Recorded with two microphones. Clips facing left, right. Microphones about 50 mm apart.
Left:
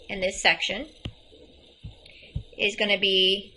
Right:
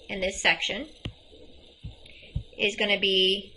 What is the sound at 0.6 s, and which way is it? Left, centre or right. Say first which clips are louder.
Speech: left 1 dB; left.